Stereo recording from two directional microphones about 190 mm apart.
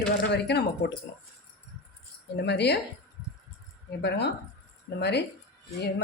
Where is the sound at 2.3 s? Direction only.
60° left (ahead or behind).